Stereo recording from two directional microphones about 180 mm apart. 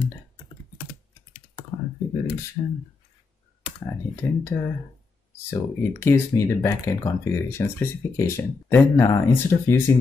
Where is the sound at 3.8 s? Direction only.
15° left (ahead or behind).